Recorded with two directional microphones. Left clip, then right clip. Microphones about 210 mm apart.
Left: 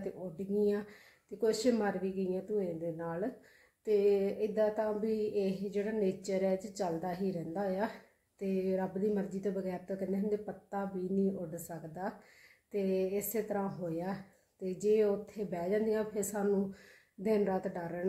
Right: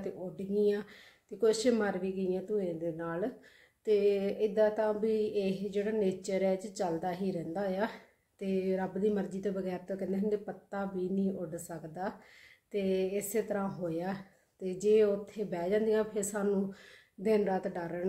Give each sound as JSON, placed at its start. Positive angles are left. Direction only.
{"t": 0.6, "sound": "speech", "side_deg": 5}